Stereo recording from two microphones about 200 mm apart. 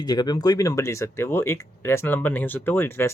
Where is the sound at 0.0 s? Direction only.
20° left (ahead or behind).